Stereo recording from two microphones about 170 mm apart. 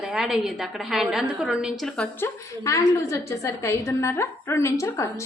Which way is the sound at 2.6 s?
20° left (ahead or behind).